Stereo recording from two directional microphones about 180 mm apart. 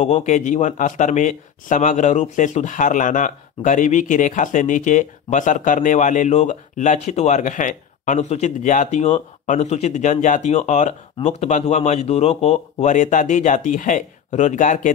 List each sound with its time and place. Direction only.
0.0 s speech: 40° left (ahead or behind)